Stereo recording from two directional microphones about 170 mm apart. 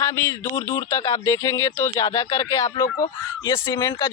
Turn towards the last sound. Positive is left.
turn(degrees=25)  # may be behind; listen again after turning